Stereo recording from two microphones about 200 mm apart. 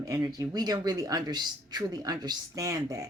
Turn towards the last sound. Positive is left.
turn(degrees=-15)  # may be behind; listen again after turning